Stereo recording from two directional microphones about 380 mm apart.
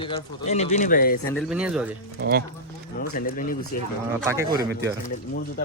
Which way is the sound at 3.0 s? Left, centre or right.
Left.